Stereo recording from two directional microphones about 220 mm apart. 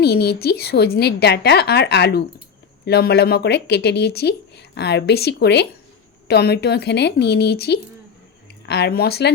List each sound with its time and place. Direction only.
0.0 s speech: 45° left (ahead or behind)